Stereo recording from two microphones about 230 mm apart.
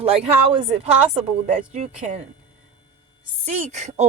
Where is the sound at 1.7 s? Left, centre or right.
Right.